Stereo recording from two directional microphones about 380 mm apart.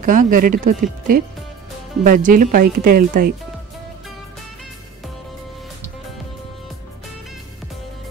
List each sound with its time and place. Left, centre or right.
0.0 s speech: right